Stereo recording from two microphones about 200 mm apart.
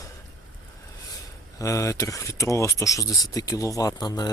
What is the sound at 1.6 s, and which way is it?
Speech, 15° left (ahead or behind).